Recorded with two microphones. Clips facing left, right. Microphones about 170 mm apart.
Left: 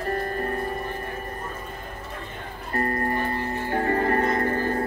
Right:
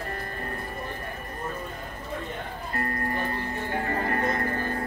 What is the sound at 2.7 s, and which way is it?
Music, 40° left (ahead or behind).